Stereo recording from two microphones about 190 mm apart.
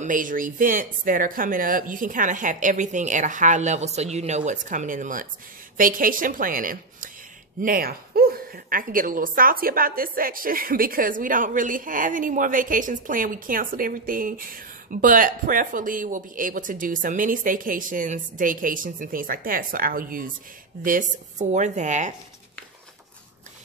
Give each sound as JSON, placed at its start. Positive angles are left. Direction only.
{"t": 0.0, "sound": "a woman's voice", "side_deg": -45}